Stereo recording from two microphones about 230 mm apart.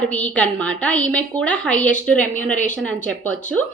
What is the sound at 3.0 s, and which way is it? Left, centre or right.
Speech, centre.